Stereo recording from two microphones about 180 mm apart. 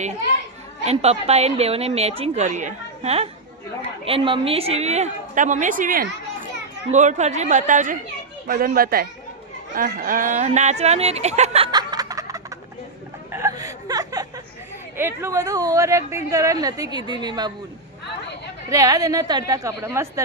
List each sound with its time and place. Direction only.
0.9 s a woman's voice: 35° right (ahead or behind)
11.7 s snicker: 20° right (ahead or behind)
13.3 s chuckle: 20° right (ahead or behind)
14.9 s speech: 15° right (ahead or behind)
18.7 s speech: 20° right (ahead or behind)